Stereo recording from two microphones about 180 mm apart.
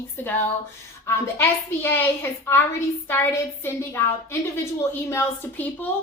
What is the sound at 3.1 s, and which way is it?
Speech, 10° left (ahead or behind).